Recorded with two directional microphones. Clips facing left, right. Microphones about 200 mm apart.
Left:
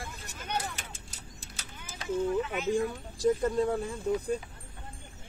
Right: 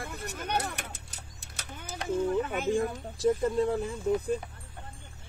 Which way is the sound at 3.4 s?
Centre (ahead or behind).